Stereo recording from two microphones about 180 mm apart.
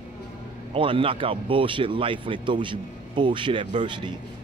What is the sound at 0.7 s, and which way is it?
Speech, 30° right (ahead or behind).